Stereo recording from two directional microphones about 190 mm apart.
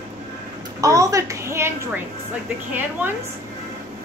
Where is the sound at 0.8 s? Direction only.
15° right (ahead or behind).